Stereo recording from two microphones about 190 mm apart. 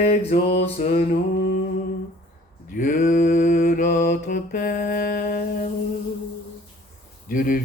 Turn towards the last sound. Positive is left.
turn(degrees=45)  # may be behind; listen again after turning